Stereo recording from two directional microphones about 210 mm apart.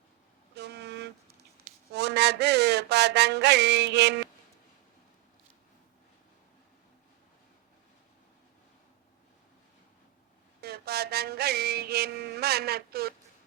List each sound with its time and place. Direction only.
0.5 s vehicle: 50° right (ahead or behind)
1.9 s a sound: 55° right (ahead or behind)
10.6 s music: 50° right (ahead or behind)